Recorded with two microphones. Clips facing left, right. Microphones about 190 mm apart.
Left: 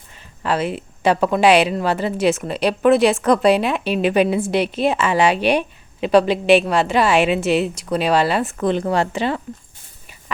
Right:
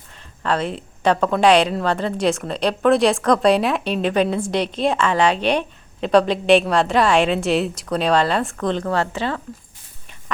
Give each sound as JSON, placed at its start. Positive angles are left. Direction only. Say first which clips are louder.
{"t": 0.1, "sound": "speech", "louder": "left 1 dB", "side_deg": 5}